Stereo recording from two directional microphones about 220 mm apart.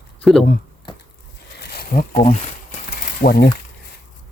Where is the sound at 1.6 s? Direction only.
45° left (ahead or behind).